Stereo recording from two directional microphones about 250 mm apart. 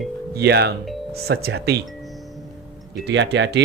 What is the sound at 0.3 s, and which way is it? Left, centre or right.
Speech, right.